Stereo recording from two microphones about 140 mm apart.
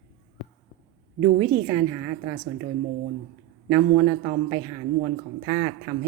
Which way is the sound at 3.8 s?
40° right (ahead or behind).